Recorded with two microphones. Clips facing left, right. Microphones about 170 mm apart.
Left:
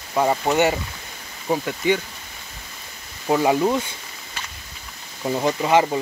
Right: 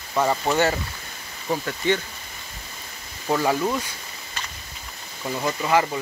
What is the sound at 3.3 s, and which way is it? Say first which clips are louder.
Speech: left 4 dB; 15° left (ahead or behind).